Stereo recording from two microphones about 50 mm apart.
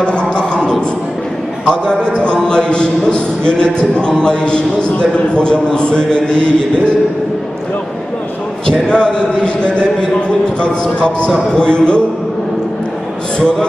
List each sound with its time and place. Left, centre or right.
0.0 s music: centre
1.7 s a man's voice: centre
8.8 s a man's voice: centre